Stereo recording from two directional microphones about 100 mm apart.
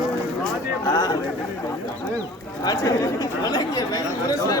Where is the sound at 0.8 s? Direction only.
30° left (ahead or behind).